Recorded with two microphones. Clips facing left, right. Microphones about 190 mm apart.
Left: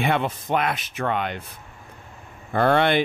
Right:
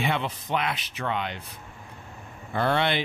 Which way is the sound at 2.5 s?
50° left (ahead or behind).